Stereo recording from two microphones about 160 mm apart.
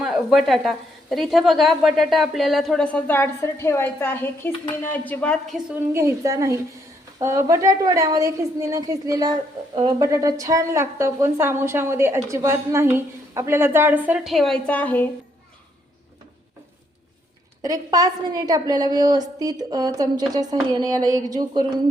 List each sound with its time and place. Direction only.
0.0 s a woman's voice: 5° right (ahead or behind)
5.9 s a woman's voice: 15° right (ahead or behind); by 15.0 s 10° left (ahead or behind)
17.6 s a woman's voice: 20° right (ahead or behind)